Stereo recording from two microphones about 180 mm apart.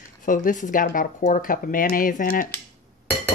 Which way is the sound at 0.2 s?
45° left (ahead or behind).